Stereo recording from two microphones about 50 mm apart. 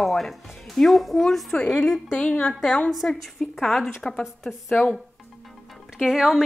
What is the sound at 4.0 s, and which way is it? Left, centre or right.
Speech, centre.